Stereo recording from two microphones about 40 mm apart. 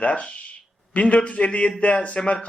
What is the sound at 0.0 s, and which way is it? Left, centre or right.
Speech, left.